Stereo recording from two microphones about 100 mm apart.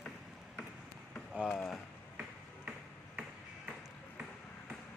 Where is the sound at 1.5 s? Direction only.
5° left (ahead or behind).